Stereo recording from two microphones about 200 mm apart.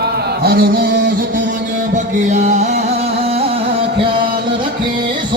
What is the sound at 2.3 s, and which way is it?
Music, 35° right (ahead or behind).